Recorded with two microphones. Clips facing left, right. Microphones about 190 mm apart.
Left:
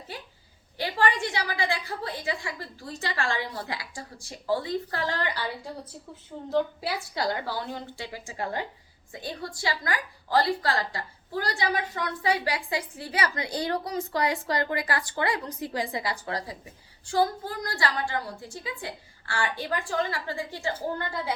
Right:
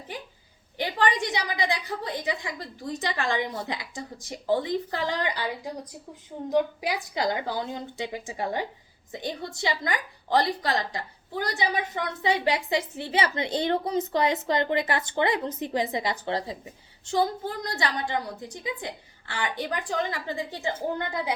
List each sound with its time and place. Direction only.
0.8 s a woman's voice: 20° right (ahead or behind)